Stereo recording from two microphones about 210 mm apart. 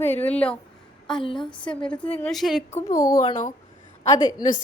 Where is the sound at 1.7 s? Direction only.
5° left (ahead or behind).